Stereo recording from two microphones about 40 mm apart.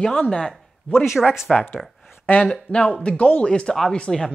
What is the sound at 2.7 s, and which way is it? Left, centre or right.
A woman's voice, left.